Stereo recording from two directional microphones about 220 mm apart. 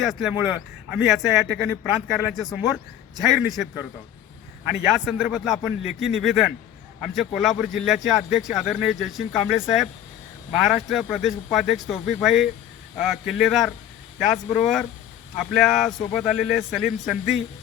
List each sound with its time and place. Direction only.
0.0 s speech: centre (ahead or behind)
4.9 s speech: 5° right (ahead or behind)